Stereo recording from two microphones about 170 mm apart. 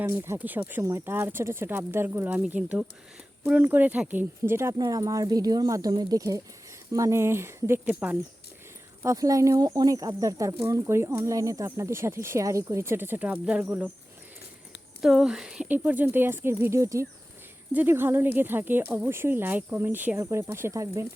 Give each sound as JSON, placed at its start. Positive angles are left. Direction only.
{"t": 0.0, "sound": "speech", "side_deg": -15}
{"t": 9.0, "sound": "speech", "side_deg": -20}
{"t": 15.0, "sound": "speech", "side_deg": -5}